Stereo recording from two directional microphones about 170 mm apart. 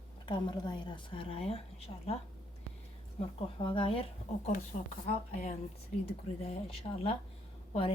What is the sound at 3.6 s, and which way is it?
Speech, 30° left (ahead or behind).